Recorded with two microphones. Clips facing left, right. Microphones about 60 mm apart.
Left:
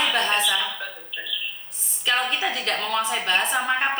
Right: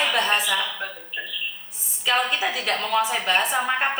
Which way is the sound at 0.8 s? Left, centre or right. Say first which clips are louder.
Right 2 dB; right.